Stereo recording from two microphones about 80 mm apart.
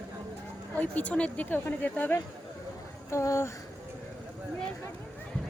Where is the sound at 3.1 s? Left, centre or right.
Left.